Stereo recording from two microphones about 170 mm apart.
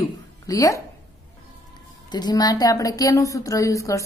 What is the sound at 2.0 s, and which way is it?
A woman's voice, 25° left (ahead or behind).